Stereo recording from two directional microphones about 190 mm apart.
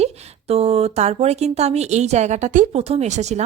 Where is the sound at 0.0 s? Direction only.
30° right (ahead or behind).